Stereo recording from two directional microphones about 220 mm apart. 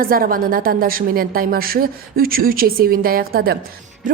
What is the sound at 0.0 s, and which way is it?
A woman's voice, 40° right (ahead or behind).